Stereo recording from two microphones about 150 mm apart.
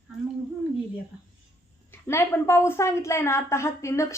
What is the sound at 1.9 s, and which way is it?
A woman's voice, 15° left (ahead or behind).